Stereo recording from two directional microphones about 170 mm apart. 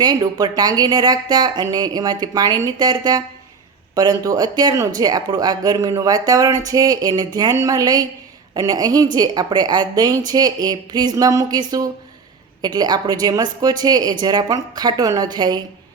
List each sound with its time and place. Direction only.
0.0 s speech: 25° right (ahead or behind)